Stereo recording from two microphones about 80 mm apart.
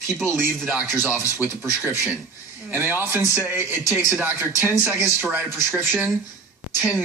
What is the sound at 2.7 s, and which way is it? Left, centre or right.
A man's voice, right.